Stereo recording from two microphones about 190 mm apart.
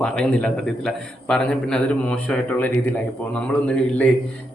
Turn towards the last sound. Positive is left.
turn(degrees=5)  # may be behind; listen again after turning